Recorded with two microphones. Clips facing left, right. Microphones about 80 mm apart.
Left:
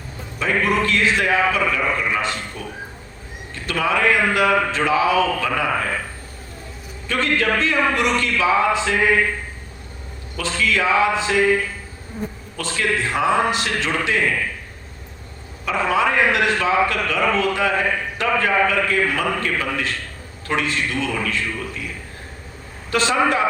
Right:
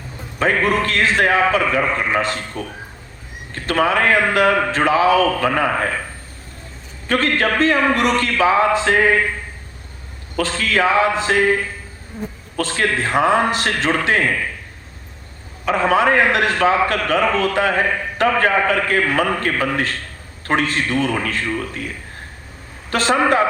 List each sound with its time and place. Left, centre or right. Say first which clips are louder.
0.3 s a man's voice: right 2 dB; right
7.1 s a man's voice: right 2 dB; right
10.3 s a man's voice: right 2 dB; right
12.5 s a man's voice: right 3 dB; right
15.6 s a man's voice: right 4 dB; right